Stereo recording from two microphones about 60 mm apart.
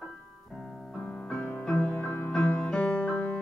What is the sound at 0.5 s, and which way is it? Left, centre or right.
Keyboard, centre.